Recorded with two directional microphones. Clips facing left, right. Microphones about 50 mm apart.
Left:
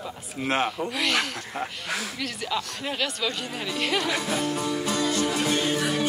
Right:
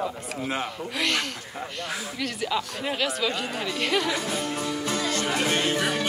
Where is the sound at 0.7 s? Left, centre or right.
Centre.